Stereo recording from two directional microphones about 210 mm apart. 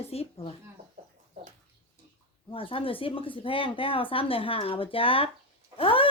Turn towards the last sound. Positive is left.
turn(degrees=25)  # may be behind; listen again after turning